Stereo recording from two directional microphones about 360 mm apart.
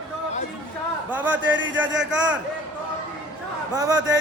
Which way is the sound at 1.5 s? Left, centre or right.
Right.